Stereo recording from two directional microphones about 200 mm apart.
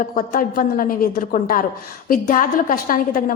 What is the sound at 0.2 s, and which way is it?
A woman's voice, 45° left (ahead or behind).